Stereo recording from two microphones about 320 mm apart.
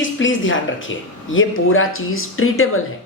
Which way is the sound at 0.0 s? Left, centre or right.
Left.